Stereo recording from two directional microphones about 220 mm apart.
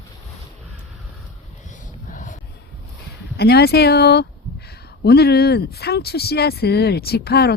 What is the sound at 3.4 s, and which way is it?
Speech, 45° left (ahead or behind).